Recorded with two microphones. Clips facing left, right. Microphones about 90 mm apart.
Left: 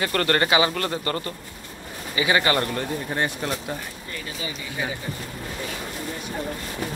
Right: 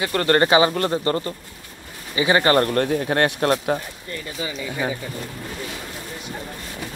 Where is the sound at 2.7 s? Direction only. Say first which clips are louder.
Right 7 dB; 70° right (ahead or behind).